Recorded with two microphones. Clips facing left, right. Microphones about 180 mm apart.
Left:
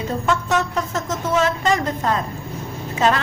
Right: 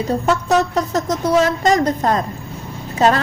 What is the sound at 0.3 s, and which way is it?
A woman's voice, 35° right (ahead or behind).